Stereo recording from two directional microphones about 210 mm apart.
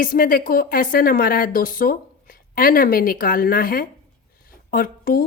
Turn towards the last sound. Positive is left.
turn(degrees=40)  # may be behind; listen again after turning